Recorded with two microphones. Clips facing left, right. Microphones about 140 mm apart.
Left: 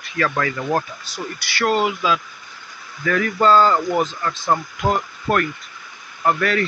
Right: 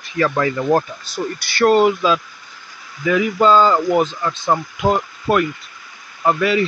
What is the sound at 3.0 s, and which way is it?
Speech, 10° right (ahead or behind).